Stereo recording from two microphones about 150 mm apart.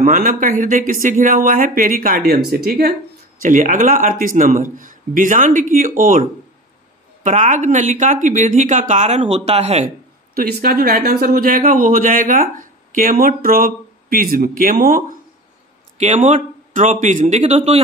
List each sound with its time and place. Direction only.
0.0 s speech: 65° right (ahead or behind); by 2.9 s 90° right
3.4 s speech: 60° right (ahead or behind)
7.2 s speech: 55° right (ahead or behind)
10.3 s speech: 80° right; by 15.1 s 60° right (ahead or behind)
16.0 s speech: 50° right (ahead or behind)